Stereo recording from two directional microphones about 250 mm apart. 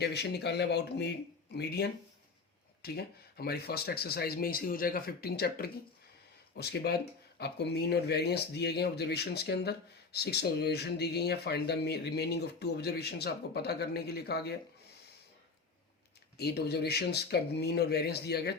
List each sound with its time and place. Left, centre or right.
0.0 s speech: left
16.4 s speech: left